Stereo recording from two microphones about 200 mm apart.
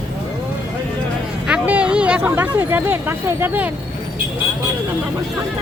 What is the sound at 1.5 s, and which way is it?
Speech, 5° right (ahead or behind).